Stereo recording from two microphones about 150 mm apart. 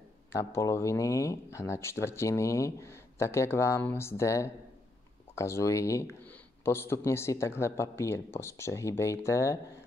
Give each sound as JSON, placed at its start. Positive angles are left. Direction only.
{"t": 0.3, "sound": "speech", "side_deg": 20}